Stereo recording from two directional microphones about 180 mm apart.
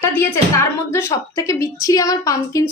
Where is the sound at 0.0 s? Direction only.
15° left (ahead or behind).